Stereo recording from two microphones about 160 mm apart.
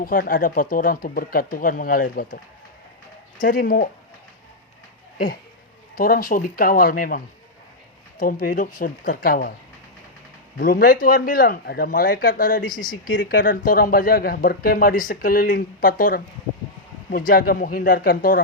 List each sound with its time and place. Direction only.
0.0 s speech: 60° left (ahead or behind)
3.4 s speech: 60° left (ahead or behind)
5.1 s speech: 60° left (ahead or behind)
8.2 s speech: 60° left (ahead or behind)
10.6 s speech: 60° left (ahead or behind)